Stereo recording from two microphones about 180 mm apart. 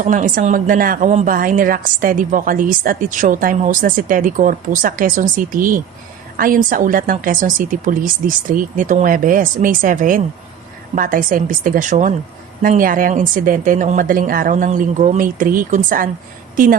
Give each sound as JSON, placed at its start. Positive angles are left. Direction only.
{"t": 0.0, "sound": "a woman's voice", "side_deg": -45}